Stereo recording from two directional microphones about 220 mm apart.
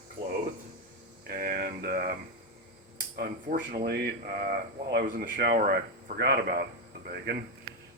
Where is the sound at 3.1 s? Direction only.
45° right (ahead or behind).